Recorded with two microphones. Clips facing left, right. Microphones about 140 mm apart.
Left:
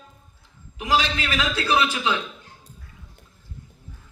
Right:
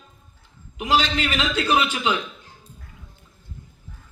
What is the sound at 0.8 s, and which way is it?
A man's voice, 20° right (ahead or behind).